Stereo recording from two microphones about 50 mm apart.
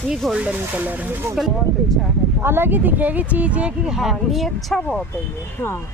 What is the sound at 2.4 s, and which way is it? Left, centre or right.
Speech, right.